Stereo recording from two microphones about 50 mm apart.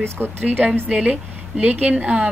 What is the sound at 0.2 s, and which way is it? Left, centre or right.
Speech, centre.